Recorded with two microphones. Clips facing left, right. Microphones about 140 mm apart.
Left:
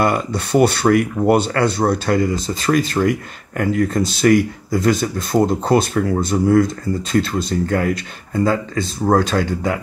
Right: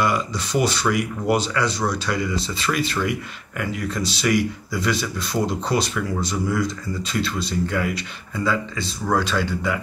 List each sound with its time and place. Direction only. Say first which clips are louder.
0.0 s speech: left 4 dB; 55° left (ahead or behind)